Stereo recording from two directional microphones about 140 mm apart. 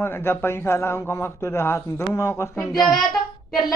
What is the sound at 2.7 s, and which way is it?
Speech, centre (ahead or behind).